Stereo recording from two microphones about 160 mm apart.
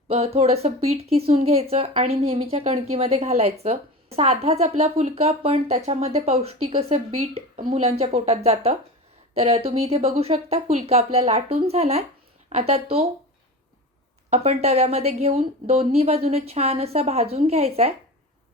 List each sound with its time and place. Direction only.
0.1 s speech: 40° right (ahead or behind)
14.3 s speech: 40° right (ahead or behind)